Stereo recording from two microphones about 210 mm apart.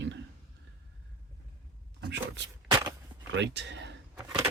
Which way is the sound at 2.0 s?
55° right (ahead or behind).